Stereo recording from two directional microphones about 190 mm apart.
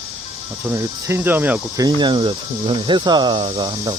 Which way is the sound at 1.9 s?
25° right (ahead or behind).